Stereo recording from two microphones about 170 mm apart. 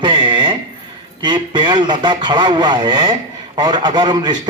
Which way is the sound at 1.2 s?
25° right (ahead or behind).